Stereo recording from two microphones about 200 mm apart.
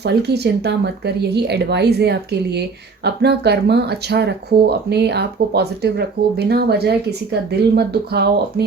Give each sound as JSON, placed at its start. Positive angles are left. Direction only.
{"t": 0.0, "sound": "speech", "side_deg": -55}